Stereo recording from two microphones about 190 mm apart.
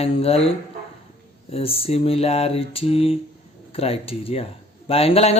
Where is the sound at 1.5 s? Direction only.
30° left (ahead or behind).